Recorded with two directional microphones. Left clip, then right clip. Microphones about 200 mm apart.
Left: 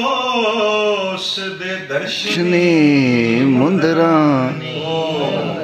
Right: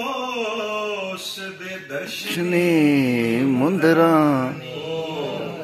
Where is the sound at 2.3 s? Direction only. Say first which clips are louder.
Left 5 dB; 20° right (ahead or behind).